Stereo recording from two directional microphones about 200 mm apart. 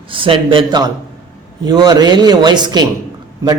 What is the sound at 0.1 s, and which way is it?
A woman's voice, 25° right (ahead or behind).